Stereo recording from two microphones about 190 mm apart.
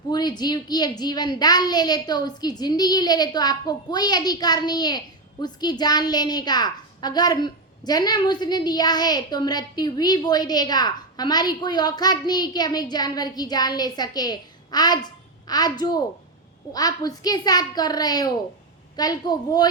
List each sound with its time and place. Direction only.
0.1 s a woman's voice: 20° left (ahead or behind)